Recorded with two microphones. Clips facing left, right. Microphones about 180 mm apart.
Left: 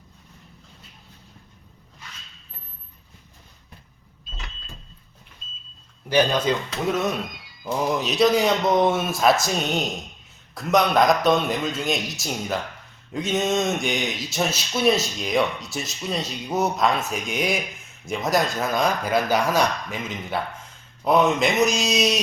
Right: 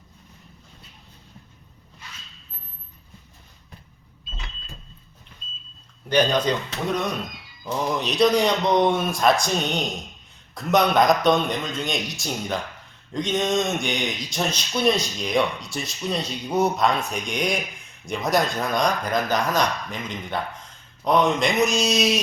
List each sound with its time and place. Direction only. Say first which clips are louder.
6.1 s speech: even; 5° left (ahead or behind)
7.6 s speech: left 1 dB; 10° left (ahead or behind)